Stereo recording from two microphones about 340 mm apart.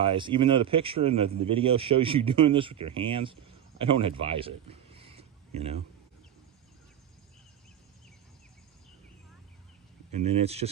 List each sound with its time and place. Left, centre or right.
0.0 s a man's voice: centre
10.1 s a man's voice: centre